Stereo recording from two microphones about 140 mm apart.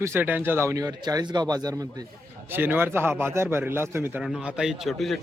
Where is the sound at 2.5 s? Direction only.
15° right (ahead or behind).